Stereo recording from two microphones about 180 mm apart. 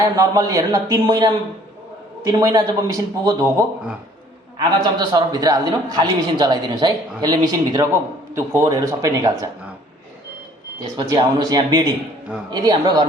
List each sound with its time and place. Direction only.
0.0 s a man's voice: 20° right (ahead or behind)
4.5 s a man's voice: 25° right (ahead or behind)
10.9 s a man's voice: 25° right (ahead or behind)